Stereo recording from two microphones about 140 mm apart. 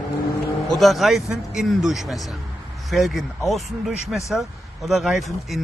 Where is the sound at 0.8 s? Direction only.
Centre (ahead or behind).